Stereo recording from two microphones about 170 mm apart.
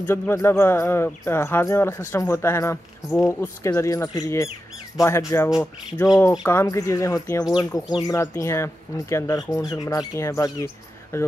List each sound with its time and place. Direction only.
0.0 s speech: 15° left (ahead or behind)